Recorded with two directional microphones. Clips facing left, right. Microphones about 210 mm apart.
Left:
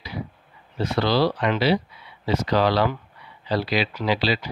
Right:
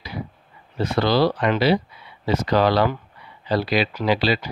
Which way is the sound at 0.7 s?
50° right (ahead or behind).